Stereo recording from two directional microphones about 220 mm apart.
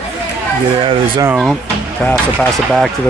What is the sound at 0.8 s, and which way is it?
Speech, 20° right (ahead or behind).